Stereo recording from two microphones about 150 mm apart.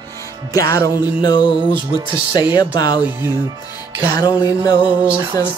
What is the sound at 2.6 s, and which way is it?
Music, 30° left (ahead or behind).